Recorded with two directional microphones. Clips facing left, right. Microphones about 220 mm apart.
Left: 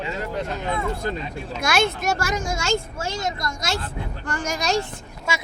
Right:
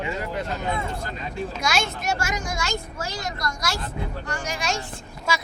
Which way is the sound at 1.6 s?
55° left (ahead or behind).